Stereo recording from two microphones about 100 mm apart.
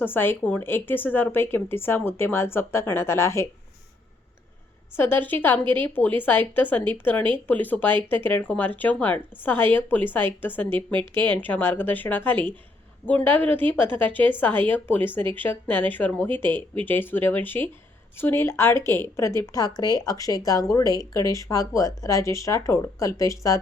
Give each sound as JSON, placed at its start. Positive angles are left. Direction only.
{"t": 0.0, "sound": "speech", "side_deg": 20}
{"t": 4.9, "sound": "speech", "side_deg": 20}